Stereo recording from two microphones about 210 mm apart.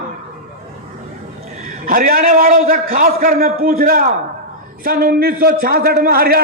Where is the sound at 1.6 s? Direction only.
40° right (ahead or behind).